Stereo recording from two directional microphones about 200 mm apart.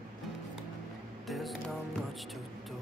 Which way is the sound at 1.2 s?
Centre (ahead or behind).